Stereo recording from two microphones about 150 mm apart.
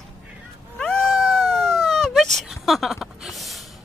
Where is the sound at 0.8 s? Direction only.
5° left (ahead or behind).